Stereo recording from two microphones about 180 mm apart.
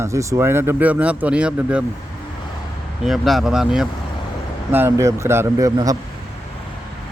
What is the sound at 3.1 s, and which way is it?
Speech, centre (ahead or behind).